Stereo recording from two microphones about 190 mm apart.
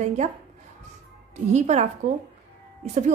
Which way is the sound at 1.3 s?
40° right (ahead or behind).